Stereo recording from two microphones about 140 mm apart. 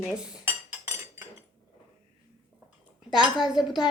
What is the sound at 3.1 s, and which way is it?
Speech, 5° right (ahead or behind).